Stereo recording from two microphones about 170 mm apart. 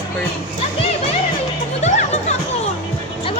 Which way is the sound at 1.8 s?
45° left (ahead or behind).